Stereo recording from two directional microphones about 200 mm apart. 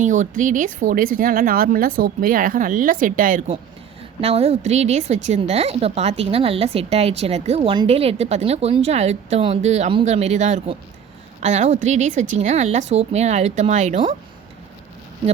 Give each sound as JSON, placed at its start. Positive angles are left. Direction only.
{"t": 0.0, "sound": "a woman's voice", "side_deg": -40}
{"t": 4.2, "sound": "a woman's voice", "side_deg": -30}